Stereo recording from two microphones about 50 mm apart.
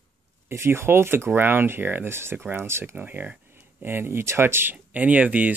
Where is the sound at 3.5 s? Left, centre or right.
Right.